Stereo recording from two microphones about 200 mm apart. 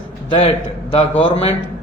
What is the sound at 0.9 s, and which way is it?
Speech, 30° left (ahead or behind).